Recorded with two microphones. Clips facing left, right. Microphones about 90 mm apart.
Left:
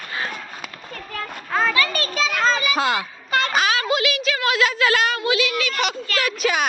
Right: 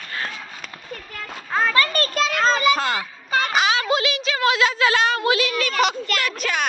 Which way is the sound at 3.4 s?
15° right (ahead or behind).